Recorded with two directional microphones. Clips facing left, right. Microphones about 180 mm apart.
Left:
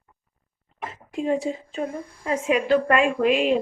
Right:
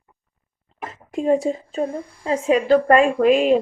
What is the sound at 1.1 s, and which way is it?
A woman's voice, 45° right (ahead or behind).